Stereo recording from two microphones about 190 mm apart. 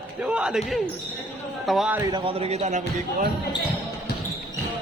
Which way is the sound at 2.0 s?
25° right (ahead or behind).